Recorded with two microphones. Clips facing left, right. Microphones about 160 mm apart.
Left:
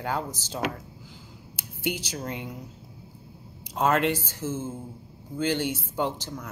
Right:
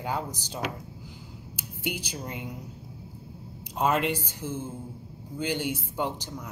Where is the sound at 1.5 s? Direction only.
10° right (ahead or behind).